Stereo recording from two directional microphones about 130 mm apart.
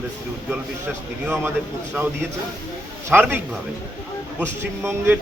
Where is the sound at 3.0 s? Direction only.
15° right (ahead or behind).